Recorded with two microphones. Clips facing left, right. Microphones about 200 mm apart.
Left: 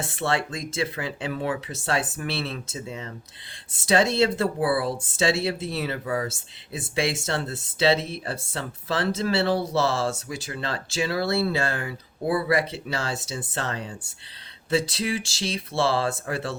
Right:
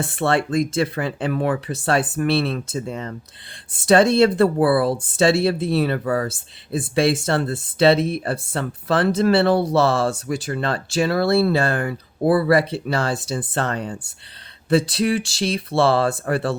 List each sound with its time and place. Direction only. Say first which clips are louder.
0.0 s speech: right 6 dB; 55° right (ahead or behind)